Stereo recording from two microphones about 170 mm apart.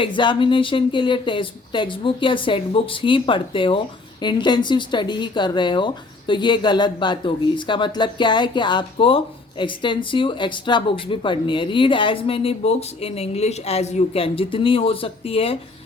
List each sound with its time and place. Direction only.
0.0 s speech: 30° left (ahead or behind)